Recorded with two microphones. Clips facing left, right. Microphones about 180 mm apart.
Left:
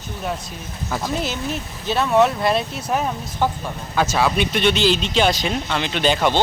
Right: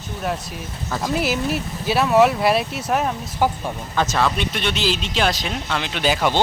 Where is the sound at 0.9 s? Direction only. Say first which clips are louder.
Even; 5° left (ahead or behind).